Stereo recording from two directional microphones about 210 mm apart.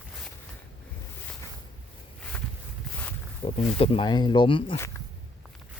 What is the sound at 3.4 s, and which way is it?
Speech, 30° left (ahead or behind).